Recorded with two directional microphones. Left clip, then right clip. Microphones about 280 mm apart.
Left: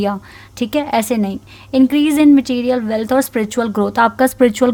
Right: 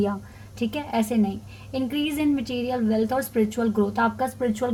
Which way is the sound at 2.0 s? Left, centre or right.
Left.